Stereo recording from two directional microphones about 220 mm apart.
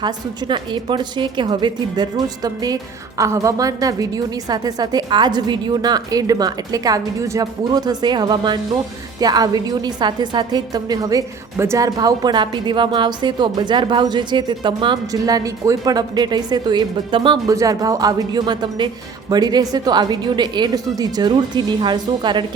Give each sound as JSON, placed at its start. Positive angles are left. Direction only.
{"t": 0.0, "sound": "a woman's voice", "side_deg": -20}